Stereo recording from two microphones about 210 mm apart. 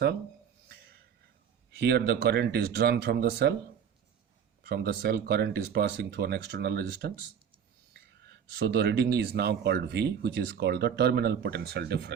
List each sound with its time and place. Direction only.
1.7 s speech: 50° right (ahead or behind)
4.6 s speech: 50° right (ahead or behind)
8.4 s speech: 50° right (ahead or behind)